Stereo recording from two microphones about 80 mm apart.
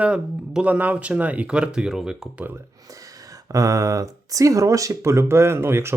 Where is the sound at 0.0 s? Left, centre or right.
Centre.